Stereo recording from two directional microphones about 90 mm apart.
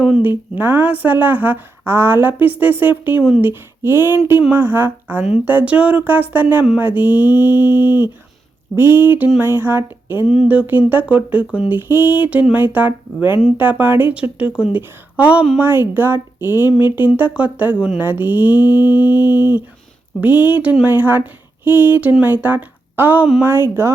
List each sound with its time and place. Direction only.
0.2 s speech: 20° right (ahead or behind)
16.6 s humming: 50° left (ahead or behind)
16.9 s speech: 20° right (ahead or behind)
18.7 s humming: 55° left (ahead or behind)
20.2 s speech: 20° right (ahead or behind)